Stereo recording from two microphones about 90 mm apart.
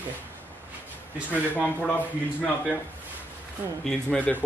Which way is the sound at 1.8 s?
15° left (ahead or behind).